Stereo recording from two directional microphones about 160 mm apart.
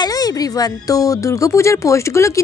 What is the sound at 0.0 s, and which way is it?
A woman's voice, 25° left (ahead or behind).